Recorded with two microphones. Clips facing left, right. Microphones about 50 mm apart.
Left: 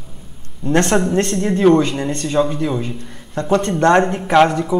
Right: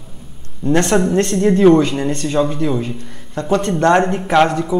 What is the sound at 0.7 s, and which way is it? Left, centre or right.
Speech, left.